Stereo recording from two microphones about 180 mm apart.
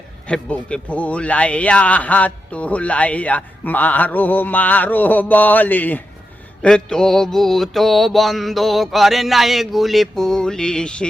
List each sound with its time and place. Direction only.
0.3 s a man's voice: 5° left (ahead or behind)
6.6 s mantra: 5° left (ahead or behind)